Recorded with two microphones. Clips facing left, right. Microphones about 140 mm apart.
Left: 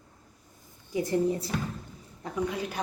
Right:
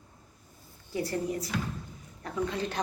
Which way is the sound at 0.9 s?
20° left (ahead or behind).